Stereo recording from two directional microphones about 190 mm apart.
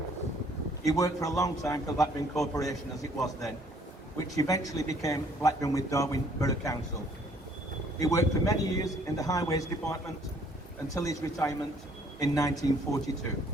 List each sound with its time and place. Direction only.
0.9 s a man's voice: 15° left (ahead or behind)
8.0 s a man's voice: 15° left (ahead or behind)